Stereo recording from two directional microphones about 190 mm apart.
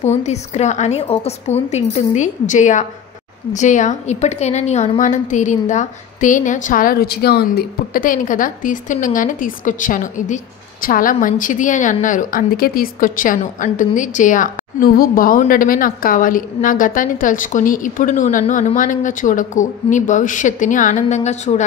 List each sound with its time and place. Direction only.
0.0 s a woman's voice: 35° left (ahead or behind)